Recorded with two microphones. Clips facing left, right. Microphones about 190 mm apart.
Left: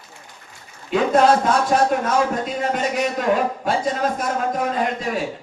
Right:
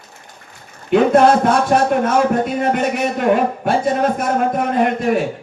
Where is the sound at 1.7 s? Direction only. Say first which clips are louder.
Right 4 dB; 60° right (ahead or behind).